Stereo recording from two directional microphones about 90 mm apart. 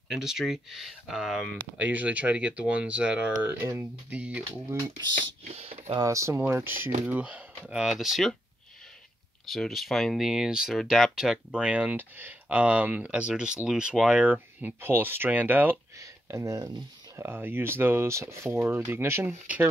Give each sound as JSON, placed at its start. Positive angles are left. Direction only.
{"t": 0.1, "sound": "speech", "side_deg": -5}
{"t": 1.8, "sound": "speech", "side_deg": -15}
{"t": 3.4, "sound": "speech", "side_deg": -30}
{"t": 4.1, "sound": "speech", "side_deg": -15}
{"t": 5.6, "sound": "speech", "side_deg": -90}
{"t": 5.9, "sound": "speech", "side_deg": -35}
{"t": 7.8, "sound": "speech", "side_deg": -5}
{"t": 9.5, "sound": "speech", "side_deg": 0}
{"t": 11.1, "sound": "speech", "side_deg": -10}
{"t": 16.0, "sound": "speech", "side_deg": -35}
{"t": 17.2, "sound": "speech", "side_deg": -25}